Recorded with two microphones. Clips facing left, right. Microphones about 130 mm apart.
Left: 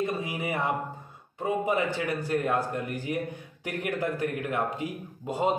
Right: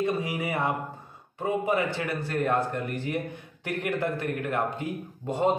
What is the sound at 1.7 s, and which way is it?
A man's voice, 15° left (ahead or behind).